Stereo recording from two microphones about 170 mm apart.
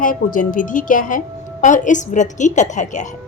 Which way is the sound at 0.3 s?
50° left (ahead or behind).